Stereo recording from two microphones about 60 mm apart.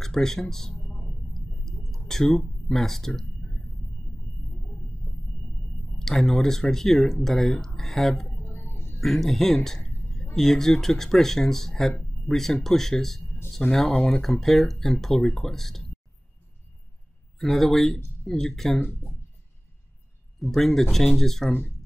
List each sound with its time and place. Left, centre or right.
0.0 s clicking: centre
5.9 s speech: centre
8.5 s music: left
9.0 s speech: centre
17.4 s speech: centre
20.3 s speech: centre